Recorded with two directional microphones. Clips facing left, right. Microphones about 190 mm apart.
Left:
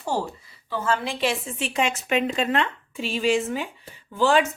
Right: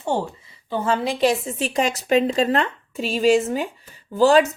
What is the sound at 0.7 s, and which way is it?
Speech, 35° right (ahead or behind).